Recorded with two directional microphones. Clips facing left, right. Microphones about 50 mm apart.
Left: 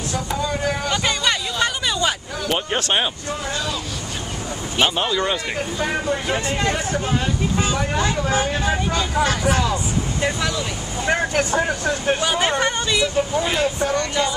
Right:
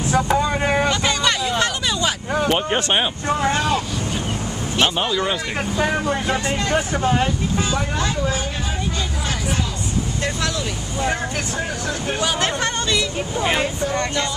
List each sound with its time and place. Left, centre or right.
0.1 s vehicle: right
1.0 s hubbub: centre
2.5 s speech: centre
3.3 s speech: right
4.7 s speech: centre
7.7 s speech: centre
12.2 s speech: centre
13.4 s speech: right